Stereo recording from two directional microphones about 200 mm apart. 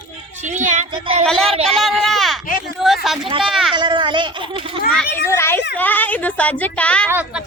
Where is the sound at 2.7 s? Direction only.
Centre (ahead or behind).